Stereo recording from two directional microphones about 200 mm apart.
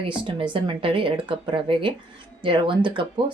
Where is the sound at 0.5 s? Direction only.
25° right (ahead or behind).